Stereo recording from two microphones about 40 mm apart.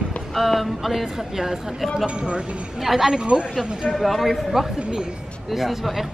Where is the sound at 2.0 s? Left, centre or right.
Right.